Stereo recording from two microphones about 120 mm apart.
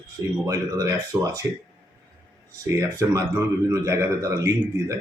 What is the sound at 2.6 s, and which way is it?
A man's voice, 25° right (ahead or behind).